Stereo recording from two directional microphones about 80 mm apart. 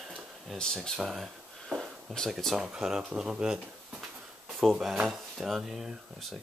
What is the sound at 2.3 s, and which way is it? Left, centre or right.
Speech, centre.